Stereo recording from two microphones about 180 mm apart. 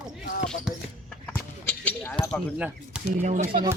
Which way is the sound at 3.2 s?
40° right (ahead or behind).